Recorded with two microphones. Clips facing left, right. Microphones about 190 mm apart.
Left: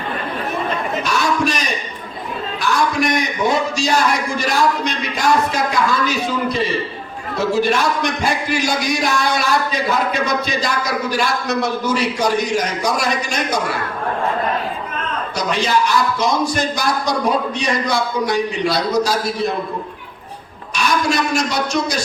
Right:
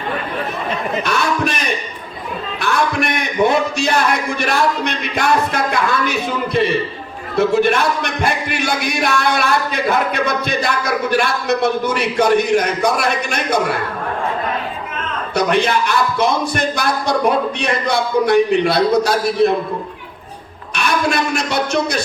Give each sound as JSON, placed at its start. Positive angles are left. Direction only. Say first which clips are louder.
{"t": 1.0, "sound": "a man's voice", "louder": "left 1 dB", "side_deg": -60}
{"t": 15.4, "sound": "a man's voice", "louder": "right 3 dB", "side_deg": -60}
{"t": 20.7, "sound": "a man's voice", "louder": "even", "side_deg": -60}